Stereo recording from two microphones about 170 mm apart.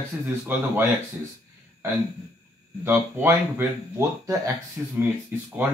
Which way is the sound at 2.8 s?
10° right (ahead or behind).